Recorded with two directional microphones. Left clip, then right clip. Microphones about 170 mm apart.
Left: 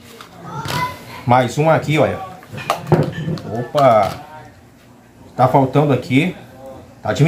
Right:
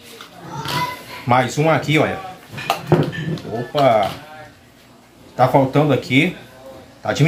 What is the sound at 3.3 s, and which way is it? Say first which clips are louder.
Speech: left 2 dB; 20° left (ahead or behind).